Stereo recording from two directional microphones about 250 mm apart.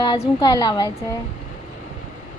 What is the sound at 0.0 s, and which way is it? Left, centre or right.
Speech, centre.